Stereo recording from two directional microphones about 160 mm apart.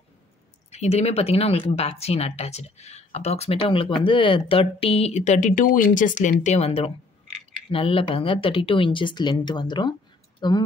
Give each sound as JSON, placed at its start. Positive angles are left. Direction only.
{"t": 0.7, "sound": "speech", "side_deg": 45}